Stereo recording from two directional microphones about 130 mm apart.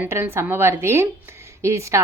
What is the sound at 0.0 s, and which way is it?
A woman's voice, 20° right (ahead or behind).